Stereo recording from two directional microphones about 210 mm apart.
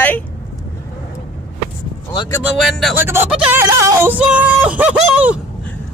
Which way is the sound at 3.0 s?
10° right (ahead or behind).